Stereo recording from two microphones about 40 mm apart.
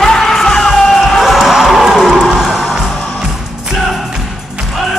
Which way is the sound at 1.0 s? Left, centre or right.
Centre.